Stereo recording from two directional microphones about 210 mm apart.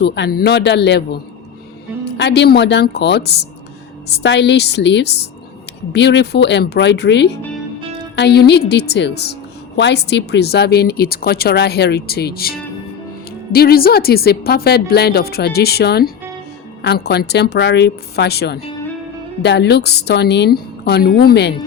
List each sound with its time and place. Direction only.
0.0 s speech: 50° left (ahead or behind)
2.1 s speech: 55° left (ahead or behind)